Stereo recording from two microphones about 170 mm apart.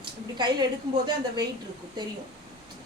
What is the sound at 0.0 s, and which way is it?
A woman's voice, 25° right (ahead or behind).